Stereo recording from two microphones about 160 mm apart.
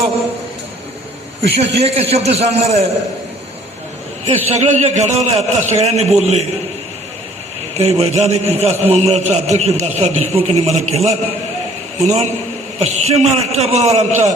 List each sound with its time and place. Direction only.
1.8 s a man's voice: 40° right (ahead or behind)
4.3 s a man's voice: 45° right (ahead or behind)
7.8 s a man's voice: 40° right (ahead or behind)